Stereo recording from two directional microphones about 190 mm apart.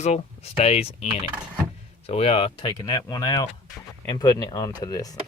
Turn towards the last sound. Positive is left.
turn(degrees=20)  # may be behind; listen again after turning